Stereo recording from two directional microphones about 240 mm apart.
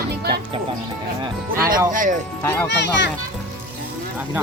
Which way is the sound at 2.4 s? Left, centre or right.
Centre.